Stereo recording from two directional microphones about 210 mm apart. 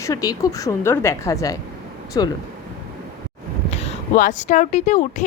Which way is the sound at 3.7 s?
35° left (ahead or behind).